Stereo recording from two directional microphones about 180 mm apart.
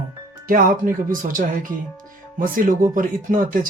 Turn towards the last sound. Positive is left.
turn(degrees=-50)  # may be behind; listen again after turning